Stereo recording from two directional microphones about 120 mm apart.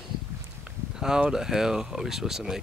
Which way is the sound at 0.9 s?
5° right (ahead or behind).